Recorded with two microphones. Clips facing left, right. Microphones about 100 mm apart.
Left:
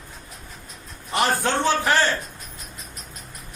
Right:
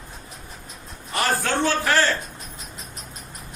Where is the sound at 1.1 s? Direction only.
20° left (ahead or behind).